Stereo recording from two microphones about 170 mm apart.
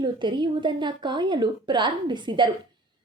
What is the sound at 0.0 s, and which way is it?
A woman's voice, 30° right (ahead or behind).